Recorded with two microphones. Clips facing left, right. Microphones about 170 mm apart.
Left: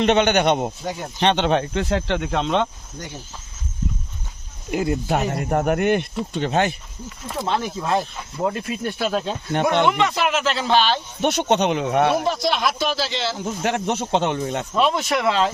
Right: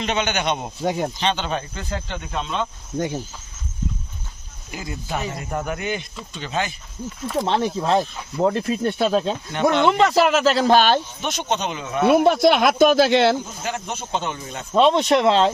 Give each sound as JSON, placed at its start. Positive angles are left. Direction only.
{"t": 0.0, "sound": "speech", "side_deg": 55}
{"t": 4.7, "sound": "speech", "side_deg": 60}
{"t": 7.4, "sound": "speech", "side_deg": -30}
{"t": 9.5, "sound": "speech", "side_deg": 55}
{"t": 9.8, "sound": "speech", "side_deg": -35}
{"t": 11.2, "sound": "speech", "side_deg": 60}
{"t": 12.1, "sound": "speech", "side_deg": -60}
{"t": 13.4, "sound": "speech", "side_deg": 70}
{"t": 14.7, "sound": "speech", "side_deg": -30}